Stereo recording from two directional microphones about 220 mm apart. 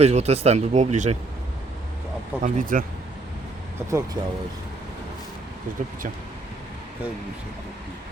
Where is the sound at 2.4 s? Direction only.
40° right (ahead or behind).